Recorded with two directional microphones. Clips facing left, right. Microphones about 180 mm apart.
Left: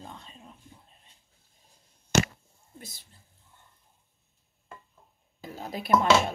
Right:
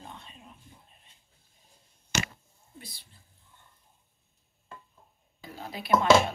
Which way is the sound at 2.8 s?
45° left (ahead or behind).